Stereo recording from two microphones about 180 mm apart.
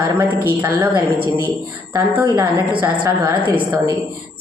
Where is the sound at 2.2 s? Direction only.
20° right (ahead or behind).